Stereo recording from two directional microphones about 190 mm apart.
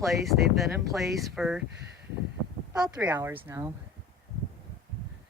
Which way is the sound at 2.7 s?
5° right (ahead or behind).